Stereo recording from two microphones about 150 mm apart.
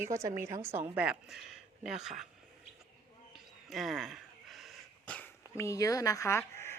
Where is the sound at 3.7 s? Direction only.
Centre (ahead or behind); by 6.7 s 15° left (ahead or behind).